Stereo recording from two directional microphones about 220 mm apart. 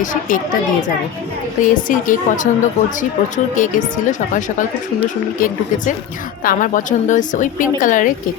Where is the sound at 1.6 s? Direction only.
35° left (ahead or behind).